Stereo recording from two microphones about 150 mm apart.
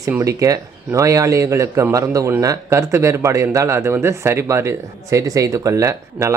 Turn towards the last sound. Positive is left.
turn(degrees=-20)  # may be behind; listen again after turning